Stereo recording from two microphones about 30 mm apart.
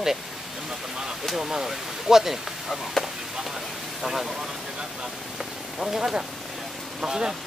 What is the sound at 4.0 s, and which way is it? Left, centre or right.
Speech, centre.